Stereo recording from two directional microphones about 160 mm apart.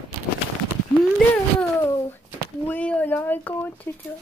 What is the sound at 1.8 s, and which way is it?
Speech, 20° left (ahead or behind).